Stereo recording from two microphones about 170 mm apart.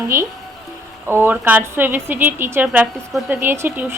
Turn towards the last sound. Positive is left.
turn(degrees=-10)  # may be behind; listen again after turning